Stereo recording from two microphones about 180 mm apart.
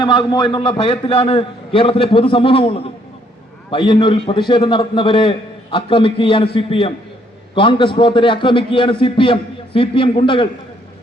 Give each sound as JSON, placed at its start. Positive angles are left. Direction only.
{"t": 0.0, "sound": "a man's voice", "side_deg": 25}